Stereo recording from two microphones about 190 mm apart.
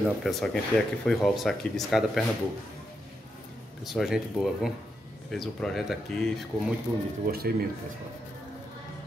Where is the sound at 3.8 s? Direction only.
Centre (ahead or behind).